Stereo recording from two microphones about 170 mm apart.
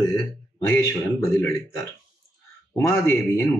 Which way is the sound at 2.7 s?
15° left (ahead or behind).